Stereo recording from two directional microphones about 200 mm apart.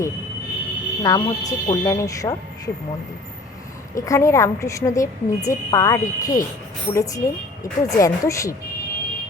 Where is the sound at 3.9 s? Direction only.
15° left (ahead or behind).